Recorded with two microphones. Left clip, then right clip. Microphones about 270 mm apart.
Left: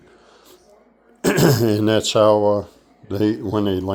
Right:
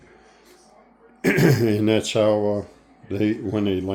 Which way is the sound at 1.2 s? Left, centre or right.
Centre.